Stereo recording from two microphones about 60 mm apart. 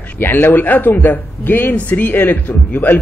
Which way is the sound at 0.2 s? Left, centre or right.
Left.